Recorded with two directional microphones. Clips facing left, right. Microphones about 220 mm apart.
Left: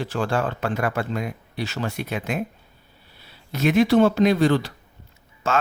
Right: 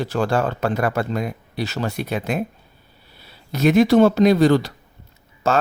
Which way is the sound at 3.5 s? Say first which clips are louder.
Right 3 dB; 40° right (ahead or behind).